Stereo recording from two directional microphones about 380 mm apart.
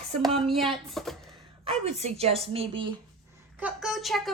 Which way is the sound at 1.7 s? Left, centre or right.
Centre.